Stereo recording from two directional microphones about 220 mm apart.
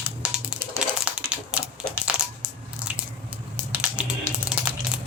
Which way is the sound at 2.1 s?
35° right (ahead or behind).